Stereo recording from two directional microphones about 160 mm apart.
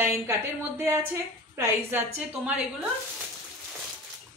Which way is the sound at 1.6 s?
15° right (ahead or behind).